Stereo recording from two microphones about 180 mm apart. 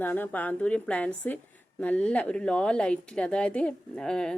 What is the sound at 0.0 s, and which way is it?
A woman's voice, 10° left (ahead or behind).